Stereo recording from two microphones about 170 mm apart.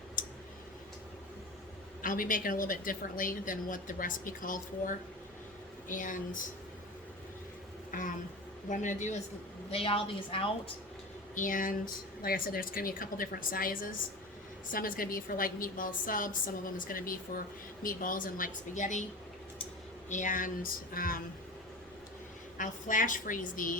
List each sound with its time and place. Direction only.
0.2 s tick: 50° left (ahead or behind)
2.0 s a woman's voice: 55° left (ahead or behind)
7.9 s a sound: 50° left (ahead or behind)
8.7 s a woman's voice: 45° left (ahead or behind)
9.6 s a woman's voice: 35° left (ahead or behind)
11.3 s a woman's voice: 50° left (ahead or behind)
20.1 s a woman's voice: 45° left (ahead or behind)
22.5 s a woman's voice: 50° left (ahead or behind)